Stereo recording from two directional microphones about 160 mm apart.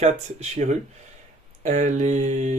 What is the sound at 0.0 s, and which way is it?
Speech, 45° right (ahead or behind).